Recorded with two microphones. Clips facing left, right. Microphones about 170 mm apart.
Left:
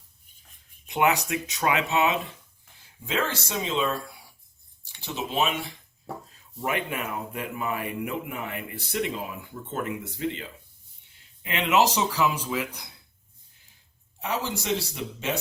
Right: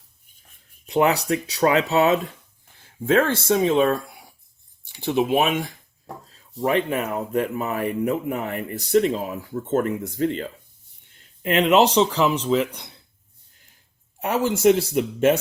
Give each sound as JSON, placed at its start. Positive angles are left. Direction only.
{"t": 0.9, "sound": "speech", "side_deg": -35}
{"t": 2.8, "sound": "speech", "side_deg": -55}
{"t": 4.0, "sound": "a sound", "side_deg": -20}
{"t": 4.9, "sound": "speech", "side_deg": -55}
{"t": 6.7, "sound": "speech", "side_deg": -35}
{"t": 14.2, "sound": "speech", "side_deg": -50}